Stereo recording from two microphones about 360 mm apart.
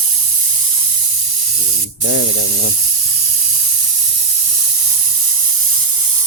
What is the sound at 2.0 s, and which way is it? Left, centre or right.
Speech, right.